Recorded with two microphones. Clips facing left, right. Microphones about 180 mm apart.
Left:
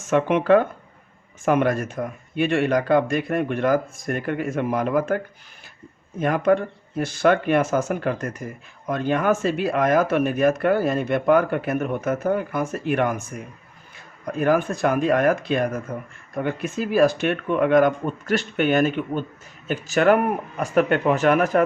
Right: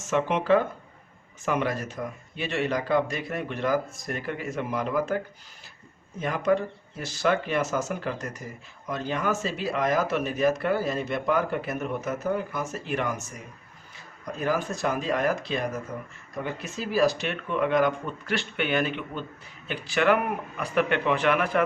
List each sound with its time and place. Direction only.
0.0 s speech: 55° left (ahead or behind)